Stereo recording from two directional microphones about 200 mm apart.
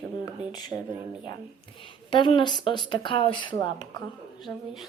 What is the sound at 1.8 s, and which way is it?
A woman's voice, 25° left (ahead or behind).